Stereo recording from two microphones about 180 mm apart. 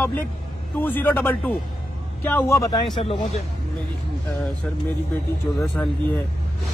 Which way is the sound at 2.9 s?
25° left (ahead or behind).